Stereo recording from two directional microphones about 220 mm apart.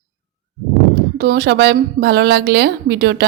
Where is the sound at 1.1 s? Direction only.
45° right (ahead or behind).